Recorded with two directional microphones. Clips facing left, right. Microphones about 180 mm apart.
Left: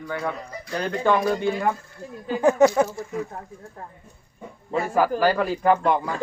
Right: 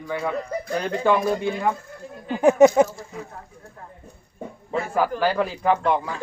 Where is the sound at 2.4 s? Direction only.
20° right (ahead or behind).